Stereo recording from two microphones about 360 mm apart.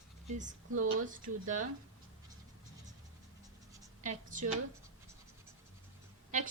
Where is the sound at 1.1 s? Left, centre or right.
Right.